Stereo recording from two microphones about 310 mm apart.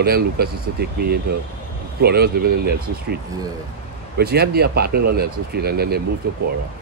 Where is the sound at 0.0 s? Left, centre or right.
Right.